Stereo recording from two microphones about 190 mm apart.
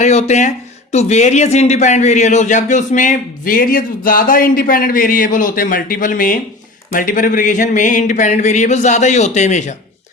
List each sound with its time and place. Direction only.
0.0 s speech: 35° left (ahead or behind)